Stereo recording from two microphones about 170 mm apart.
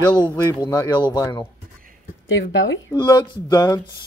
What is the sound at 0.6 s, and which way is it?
Speech, 20° left (ahead or behind).